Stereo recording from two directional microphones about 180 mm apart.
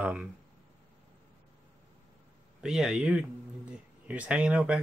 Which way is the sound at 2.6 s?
5° right (ahead or behind).